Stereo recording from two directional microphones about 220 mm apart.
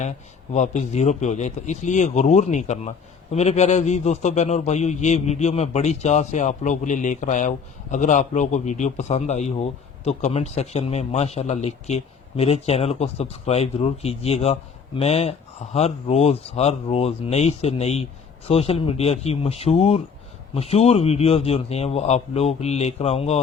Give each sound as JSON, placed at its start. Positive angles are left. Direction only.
{"t": 0.5, "sound": "a man's voice", "side_deg": 30}